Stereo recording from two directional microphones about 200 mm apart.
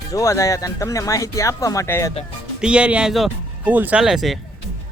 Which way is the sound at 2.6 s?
5° right (ahead or behind).